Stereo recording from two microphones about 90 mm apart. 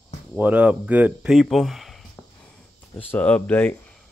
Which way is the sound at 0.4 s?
15° right (ahead or behind).